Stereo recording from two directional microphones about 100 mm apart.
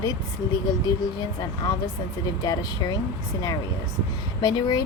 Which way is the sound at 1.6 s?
35° left (ahead or behind).